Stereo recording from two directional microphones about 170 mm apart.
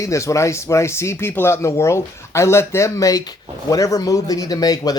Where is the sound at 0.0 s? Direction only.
20° left (ahead or behind).